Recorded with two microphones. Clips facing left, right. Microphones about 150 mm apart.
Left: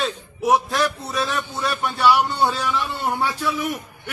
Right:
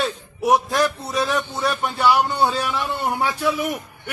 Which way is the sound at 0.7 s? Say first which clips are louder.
Right 2 dB; 10° right (ahead or behind).